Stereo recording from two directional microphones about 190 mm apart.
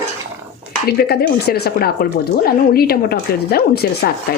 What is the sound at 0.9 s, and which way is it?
Speech, 55° left (ahead or behind).